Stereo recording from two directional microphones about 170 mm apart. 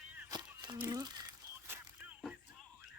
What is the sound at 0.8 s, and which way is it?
Crumpling, 25° right (ahead or behind).